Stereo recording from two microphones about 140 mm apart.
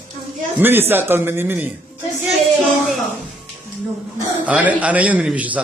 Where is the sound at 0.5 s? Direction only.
15° right (ahead or behind).